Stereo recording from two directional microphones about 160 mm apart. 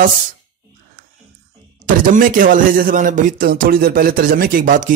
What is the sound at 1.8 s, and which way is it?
Speech, 60° right (ahead or behind).